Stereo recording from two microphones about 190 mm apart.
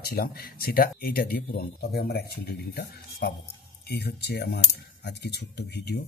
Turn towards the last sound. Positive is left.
turn(degrees=60)  # may be behind; listen again after turning